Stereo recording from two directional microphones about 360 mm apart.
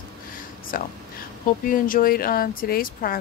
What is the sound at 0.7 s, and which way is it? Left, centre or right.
Speech, left.